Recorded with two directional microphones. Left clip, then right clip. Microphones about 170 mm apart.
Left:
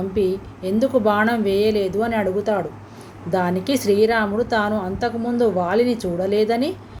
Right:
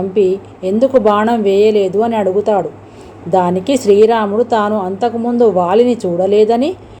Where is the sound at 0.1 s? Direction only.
15° right (ahead or behind).